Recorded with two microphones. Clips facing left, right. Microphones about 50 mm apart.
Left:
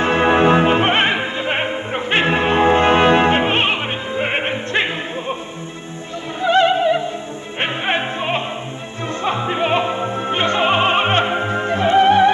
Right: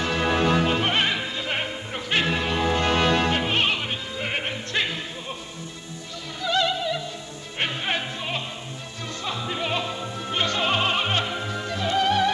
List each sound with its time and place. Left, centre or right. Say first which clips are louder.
0.0 s music: left 9 dB; left
6.4 s opera: left 10 dB; left
7.6 s music: left 7 dB; left